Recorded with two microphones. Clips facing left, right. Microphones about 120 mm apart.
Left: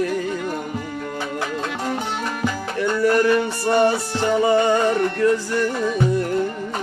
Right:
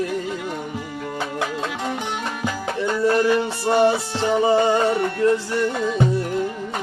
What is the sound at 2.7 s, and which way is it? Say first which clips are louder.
Music: left 1 dB; 25° right (ahead or behind).